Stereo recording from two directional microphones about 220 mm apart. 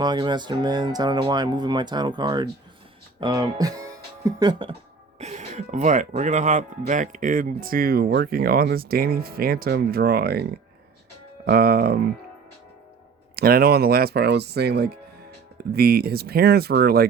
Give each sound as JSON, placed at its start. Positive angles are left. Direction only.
{"t": 0.0, "sound": "speech", "side_deg": -20}
{"t": 5.2, "sound": "speech", "side_deg": -30}
{"t": 11.4, "sound": "speech", "side_deg": -45}
{"t": 13.3, "sound": "speech", "side_deg": -45}